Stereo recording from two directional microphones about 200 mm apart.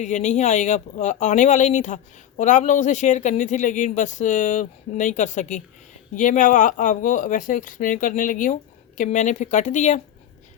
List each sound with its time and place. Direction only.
0.0 s speech: 35° left (ahead or behind)